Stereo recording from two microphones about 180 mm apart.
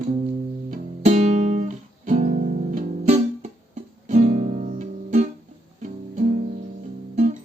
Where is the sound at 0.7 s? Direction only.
40° right (ahead or behind).